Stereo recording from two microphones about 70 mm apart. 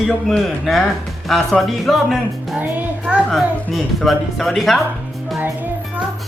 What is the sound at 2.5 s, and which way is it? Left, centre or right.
Speech, right.